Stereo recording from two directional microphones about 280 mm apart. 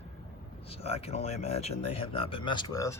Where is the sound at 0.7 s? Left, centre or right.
Left.